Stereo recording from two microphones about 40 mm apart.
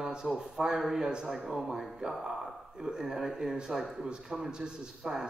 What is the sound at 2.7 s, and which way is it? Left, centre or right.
A man's voice, centre.